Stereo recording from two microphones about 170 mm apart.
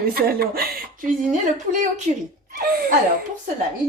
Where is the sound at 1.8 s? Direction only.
45° right (ahead or behind).